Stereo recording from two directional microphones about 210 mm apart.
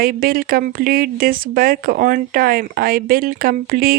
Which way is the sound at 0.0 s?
45° right (ahead or behind).